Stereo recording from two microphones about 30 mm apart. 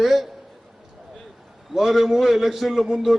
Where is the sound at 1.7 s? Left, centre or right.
Centre.